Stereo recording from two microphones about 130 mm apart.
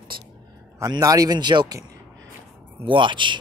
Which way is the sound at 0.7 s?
25° right (ahead or behind).